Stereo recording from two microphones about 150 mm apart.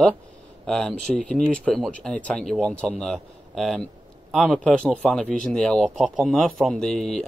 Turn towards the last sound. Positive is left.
turn(degrees=0)  # may be behind; listen again after turning